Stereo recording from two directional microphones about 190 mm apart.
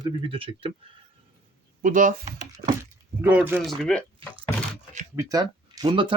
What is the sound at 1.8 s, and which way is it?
Speech, 45° right (ahead or behind).